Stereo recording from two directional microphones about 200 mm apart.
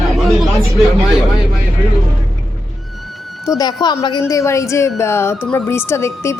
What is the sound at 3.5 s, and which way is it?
A woman's voice, 20° left (ahead or behind).